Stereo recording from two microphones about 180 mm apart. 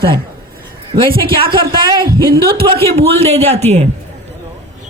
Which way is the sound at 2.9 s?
35° right (ahead or behind).